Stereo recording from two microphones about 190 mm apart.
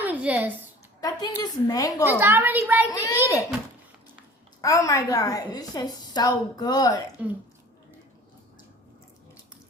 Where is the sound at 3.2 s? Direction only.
15° right (ahead or behind).